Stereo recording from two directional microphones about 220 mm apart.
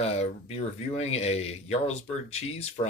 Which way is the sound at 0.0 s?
30° left (ahead or behind).